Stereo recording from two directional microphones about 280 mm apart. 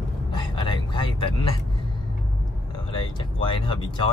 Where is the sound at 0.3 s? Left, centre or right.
Centre.